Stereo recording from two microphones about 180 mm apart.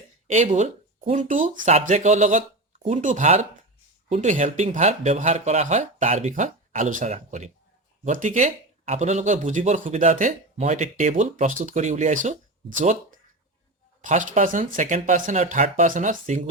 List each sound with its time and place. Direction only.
0.3 s speech: 40° right (ahead or behind)
14.0 s speech: 45° right (ahead or behind)